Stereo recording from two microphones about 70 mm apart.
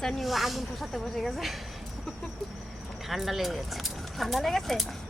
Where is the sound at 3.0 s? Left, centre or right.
Centre.